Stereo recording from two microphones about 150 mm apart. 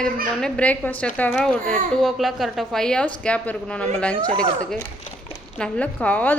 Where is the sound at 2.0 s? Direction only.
Centre (ahead or behind).